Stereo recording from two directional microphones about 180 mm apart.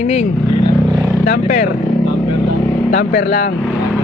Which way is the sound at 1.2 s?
50° left (ahead or behind).